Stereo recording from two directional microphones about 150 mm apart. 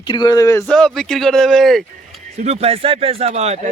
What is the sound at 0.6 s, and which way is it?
Speech, 5° left (ahead or behind).